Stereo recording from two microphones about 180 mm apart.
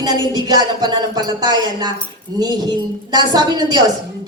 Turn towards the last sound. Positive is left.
turn(degrees=-20)  # may be behind; listen again after turning